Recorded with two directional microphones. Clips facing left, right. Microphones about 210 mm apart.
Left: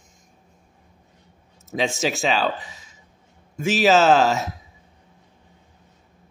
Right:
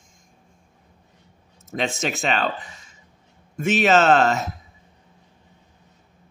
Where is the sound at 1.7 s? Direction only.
Centre (ahead or behind).